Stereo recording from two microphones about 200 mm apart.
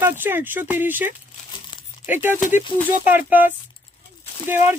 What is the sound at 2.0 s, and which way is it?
Speech, 25° left (ahead or behind).